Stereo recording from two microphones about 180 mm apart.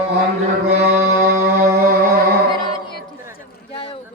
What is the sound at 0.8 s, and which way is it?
Mantra, 45° right (ahead or behind).